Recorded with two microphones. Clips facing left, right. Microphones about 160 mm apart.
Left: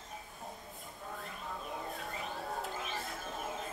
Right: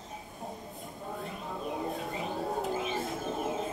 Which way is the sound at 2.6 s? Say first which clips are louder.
Right 8 dB; 5° right (ahead or behind).